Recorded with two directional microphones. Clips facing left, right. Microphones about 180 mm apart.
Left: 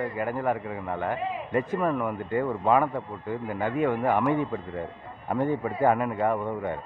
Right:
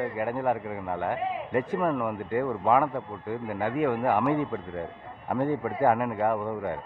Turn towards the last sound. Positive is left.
turn(degrees=-5)  # may be behind; listen again after turning